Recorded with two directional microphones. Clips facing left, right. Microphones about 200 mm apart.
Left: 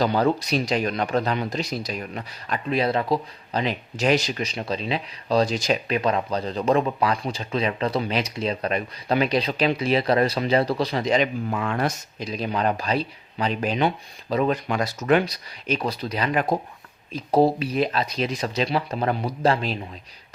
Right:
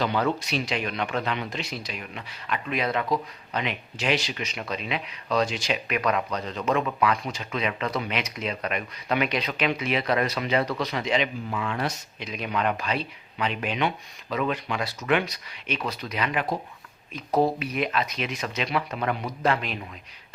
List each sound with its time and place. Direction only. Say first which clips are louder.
0.0 s speech: left 4 dB; 35° left (ahead or behind)
6.0 s speech: left 3 dB; 30° left (ahead or behind)
17.1 s speech: left 4 dB; 30° left (ahead or behind)